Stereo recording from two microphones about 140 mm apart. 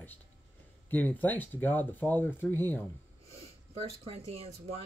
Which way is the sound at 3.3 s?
50° right (ahead or behind).